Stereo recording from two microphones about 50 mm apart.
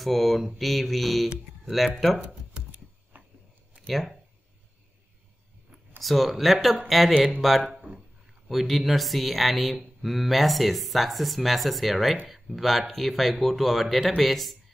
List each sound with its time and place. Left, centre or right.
0.0 s speech: centre
2.7 s a sound: right
3.8 s speech: centre
5.9 s speech: centre